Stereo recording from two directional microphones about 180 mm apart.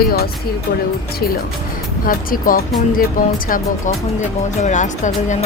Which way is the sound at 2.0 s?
50° left (ahead or behind).